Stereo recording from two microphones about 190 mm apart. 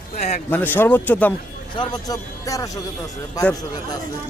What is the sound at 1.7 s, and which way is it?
A man's voice, 20° left (ahead or behind).